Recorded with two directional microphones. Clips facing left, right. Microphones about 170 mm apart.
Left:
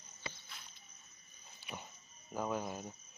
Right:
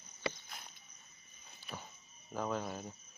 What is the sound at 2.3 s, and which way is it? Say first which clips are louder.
Speech: even; 10° left (ahead or behind).